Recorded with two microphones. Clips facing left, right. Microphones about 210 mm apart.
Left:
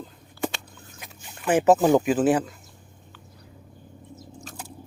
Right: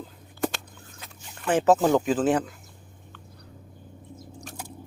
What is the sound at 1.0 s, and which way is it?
Speech, 10° left (ahead or behind).